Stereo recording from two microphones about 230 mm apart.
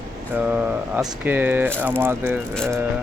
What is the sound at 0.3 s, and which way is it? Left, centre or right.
Speech, centre.